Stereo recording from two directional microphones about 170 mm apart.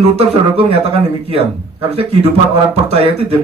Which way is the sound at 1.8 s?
35° right (ahead or behind).